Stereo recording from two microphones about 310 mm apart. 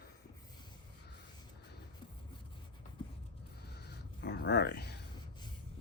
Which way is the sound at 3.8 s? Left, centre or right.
Left.